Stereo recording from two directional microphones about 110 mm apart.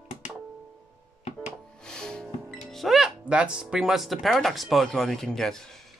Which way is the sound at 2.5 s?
Centre (ahead or behind).